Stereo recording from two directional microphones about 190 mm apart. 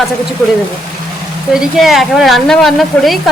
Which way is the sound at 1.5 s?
Centre (ahead or behind).